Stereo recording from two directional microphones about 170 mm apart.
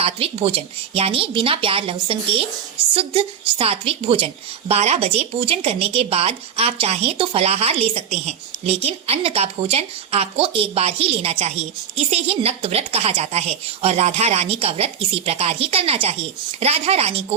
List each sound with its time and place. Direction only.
0.0 s a woman's voice: 35° right (ahead or behind)